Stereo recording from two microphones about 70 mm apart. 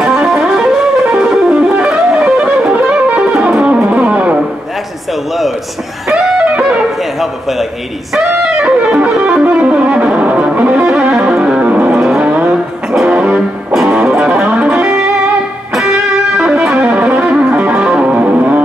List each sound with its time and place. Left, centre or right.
0.0 s music: centre
6.0 s music: centre
8.1 s music: centre
12.9 s music: centre
13.2 s music: centre
16.4 s music: centre; by 18.6 s right